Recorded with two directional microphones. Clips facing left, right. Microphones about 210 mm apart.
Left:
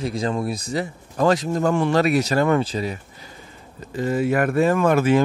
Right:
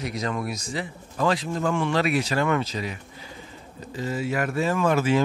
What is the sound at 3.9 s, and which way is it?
Speech, 55° left (ahead or behind).